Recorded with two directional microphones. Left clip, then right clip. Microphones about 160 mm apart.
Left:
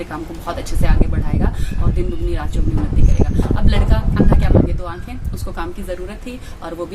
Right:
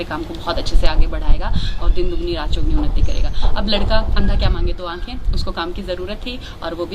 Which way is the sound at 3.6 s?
15° left (ahead or behind).